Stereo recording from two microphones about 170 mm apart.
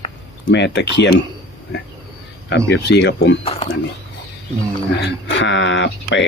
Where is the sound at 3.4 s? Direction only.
35° left (ahead or behind).